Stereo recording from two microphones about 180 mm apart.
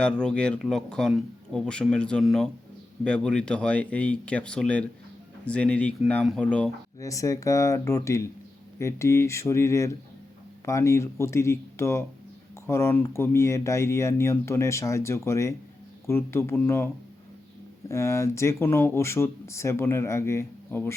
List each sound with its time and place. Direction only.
0.0 s speech: 5° left (ahead or behind)
7.0 s speech: 20° left (ahead or behind)